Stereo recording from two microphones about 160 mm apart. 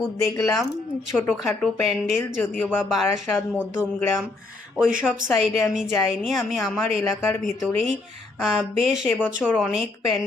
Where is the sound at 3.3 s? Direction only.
15° left (ahead or behind).